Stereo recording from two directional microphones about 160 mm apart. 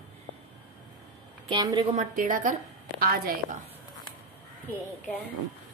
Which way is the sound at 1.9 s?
50° right (ahead or behind).